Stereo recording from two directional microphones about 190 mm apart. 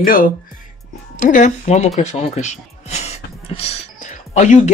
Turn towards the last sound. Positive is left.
turn(degrees=40)  # may be behind; listen again after turning